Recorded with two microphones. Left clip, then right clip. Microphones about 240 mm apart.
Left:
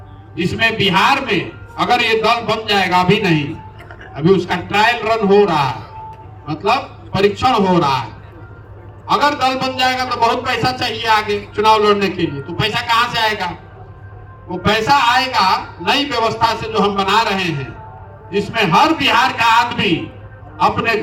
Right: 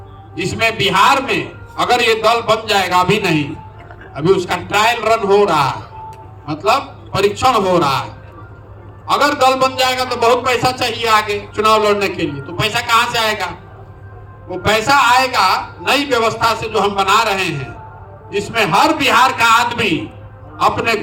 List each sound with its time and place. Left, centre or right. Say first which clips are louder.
0.3 s a man's voice: even; right
1.8 s a man's voice: right 1 dB; centre
2.6 s a man's voice: left 3 dB; right
9.0 s a man's voice: right 2 dB; right
14.7 s a man's voice: right 1 dB; right